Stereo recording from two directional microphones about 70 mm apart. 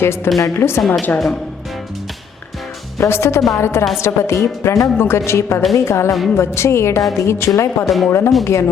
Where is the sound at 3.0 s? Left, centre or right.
Left.